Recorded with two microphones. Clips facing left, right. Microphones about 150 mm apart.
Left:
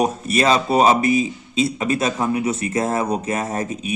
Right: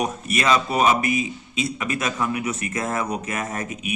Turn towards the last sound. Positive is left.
turn(degrees=30)  # may be behind; listen again after turning